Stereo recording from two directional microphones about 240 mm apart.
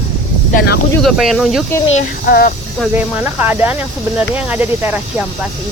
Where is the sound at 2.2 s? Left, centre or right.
Left.